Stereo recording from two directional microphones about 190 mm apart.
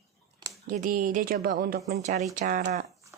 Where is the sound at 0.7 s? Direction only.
45° right (ahead or behind).